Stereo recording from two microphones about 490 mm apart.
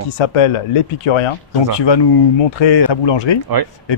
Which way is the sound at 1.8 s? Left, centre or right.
Left.